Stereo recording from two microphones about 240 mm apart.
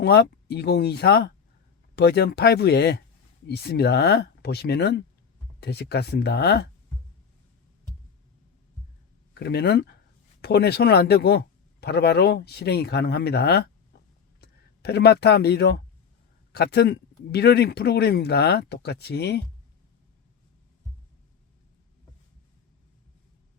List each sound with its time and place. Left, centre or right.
0.0 s speech: left
9.3 s speech: left